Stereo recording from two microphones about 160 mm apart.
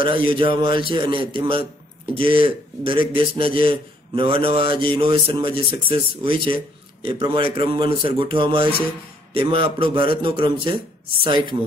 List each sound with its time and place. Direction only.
0.0 s speech: 30° right (ahead or behind)